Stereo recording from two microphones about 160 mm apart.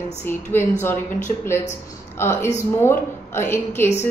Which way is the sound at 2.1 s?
15° left (ahead or behind).